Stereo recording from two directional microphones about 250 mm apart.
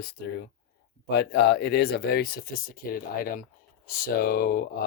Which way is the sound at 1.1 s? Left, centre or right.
Left.